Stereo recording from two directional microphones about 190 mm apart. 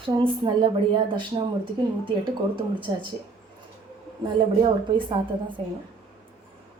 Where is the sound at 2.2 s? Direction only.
25° right (ahead or behind).